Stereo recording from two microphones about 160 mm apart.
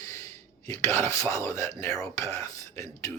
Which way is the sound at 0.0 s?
15° left (ahead or behind).